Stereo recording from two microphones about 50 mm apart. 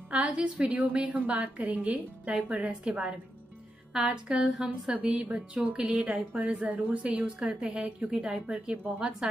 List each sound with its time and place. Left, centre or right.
0.1 s a woman's voice: right
3.9 s a woman's voice: centre
7.2 s a woman's voice: centre
8.7 s speech: right
9.2 s speech: centre